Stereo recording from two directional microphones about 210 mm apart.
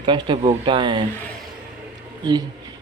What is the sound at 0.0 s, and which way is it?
Speech, 20° right (ahead or behind).